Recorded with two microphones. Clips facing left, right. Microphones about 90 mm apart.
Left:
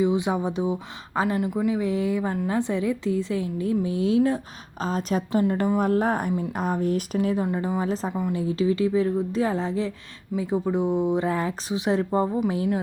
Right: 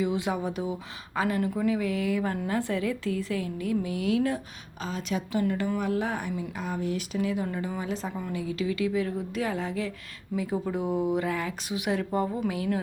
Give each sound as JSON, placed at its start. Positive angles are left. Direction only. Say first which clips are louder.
{"t": 0.0, "sound": "speech", "louder": "left 5 dB", "side_deg": 20}
{"t": 1.4, "sound": "speech", "louder": "left 2 dB", "side_deg": 15}
{"t": 4.8, "sound": "a woman's voice", "louder": "left 6 dB", "side_deg": 40}
{"t": 7.4, "sound": "a woman's voice", "louder": "left 6 dB", "side_deg": 25}